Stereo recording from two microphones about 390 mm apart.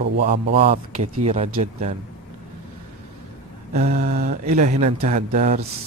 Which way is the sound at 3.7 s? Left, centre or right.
Right.